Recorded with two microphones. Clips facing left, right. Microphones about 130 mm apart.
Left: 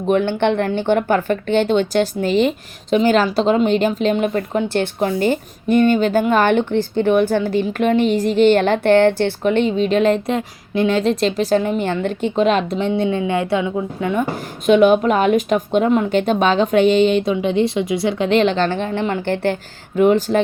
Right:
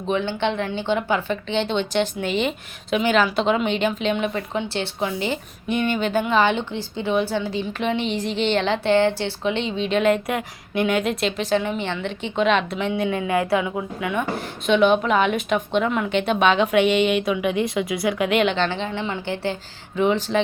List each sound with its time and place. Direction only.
0.1 s speech: 55° left (ahead or behind)